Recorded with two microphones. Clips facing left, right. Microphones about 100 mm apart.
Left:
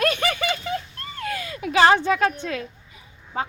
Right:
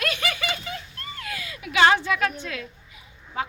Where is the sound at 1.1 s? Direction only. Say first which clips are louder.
Left 7 dB; 35° left (ahead or behind).